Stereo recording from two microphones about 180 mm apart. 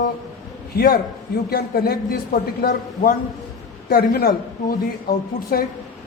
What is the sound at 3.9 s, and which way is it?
A man's voice, 60° left (ahead or behind).